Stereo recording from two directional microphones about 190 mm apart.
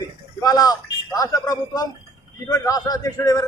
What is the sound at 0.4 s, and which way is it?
A man's voice, 20° left (ahead or behind).